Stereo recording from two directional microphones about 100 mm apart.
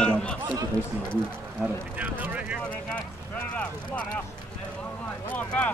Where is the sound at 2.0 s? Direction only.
15° right (ahead or behind).